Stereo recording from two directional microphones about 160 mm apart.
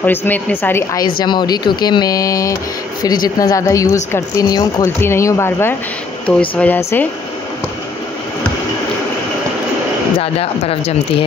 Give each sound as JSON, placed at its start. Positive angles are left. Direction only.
{"t": 0.0, "sound": "a woman's voice", "side_deg": 10}
{"t": 1.2, "sound": "a woman's voice", "side_deg": 25}
{"t": 10.2, "sound": "speech", "side_deg": 35}